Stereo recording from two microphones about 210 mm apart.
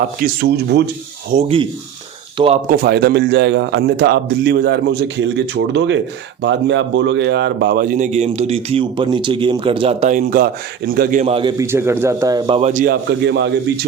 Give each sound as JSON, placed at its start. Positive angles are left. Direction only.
{"t": 0.2, "sound": "a man's voice", "side_deg": -55}
{"t": 1.3, "sound": "a man's voice", "side_deg": -30}
{"t": 2.6, "sound": "a man's voice", "side_deg": -45}
{"t": 11.5, "sound": "a man's voice", "side_deg": -10}